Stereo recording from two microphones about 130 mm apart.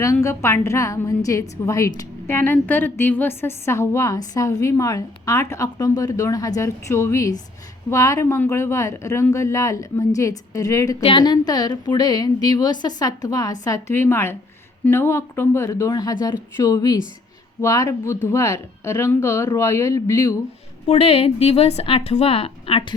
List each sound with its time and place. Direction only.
0.0 s a woman's voice: 20° left (ahead or behind)
11.0 s a woman's voice: 40° left (ahead or behind)
20.8 s a woman's voice: 55° left (ahead or behind)